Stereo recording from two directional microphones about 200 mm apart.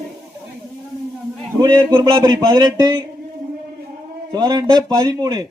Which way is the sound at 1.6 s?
15° right (ahead or behind).